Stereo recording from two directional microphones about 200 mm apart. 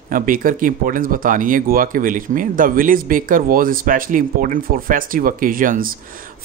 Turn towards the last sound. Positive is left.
turn(degrees=-45)  # may be behind; listen again after turning